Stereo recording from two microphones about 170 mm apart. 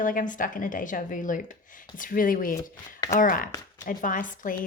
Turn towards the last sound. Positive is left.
turn(degrees=50)  # may be behind; listen again after turning